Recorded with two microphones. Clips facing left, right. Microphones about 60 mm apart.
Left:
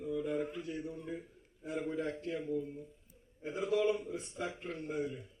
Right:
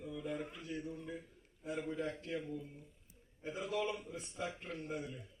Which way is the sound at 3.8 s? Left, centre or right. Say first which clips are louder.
Left 7 dB; centre.